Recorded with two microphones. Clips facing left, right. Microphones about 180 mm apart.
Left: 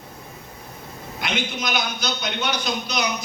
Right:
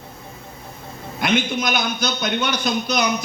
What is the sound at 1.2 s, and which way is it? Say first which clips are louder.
A man's voice: right 7 dB; 50° right (ahead or behind).